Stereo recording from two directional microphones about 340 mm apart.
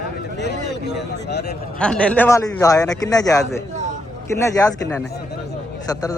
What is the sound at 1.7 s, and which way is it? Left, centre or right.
Speech, centre.